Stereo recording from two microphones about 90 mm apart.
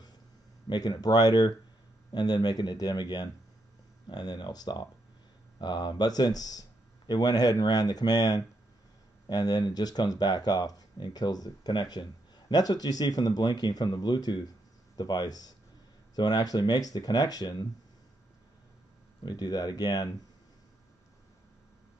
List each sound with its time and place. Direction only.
0.7 s speech: 55° left (ahead or behind)
19.2 s speech: 50° left (ahead or behind)